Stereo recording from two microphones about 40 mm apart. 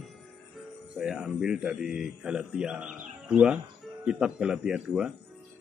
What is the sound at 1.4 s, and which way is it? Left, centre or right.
Speech, centre.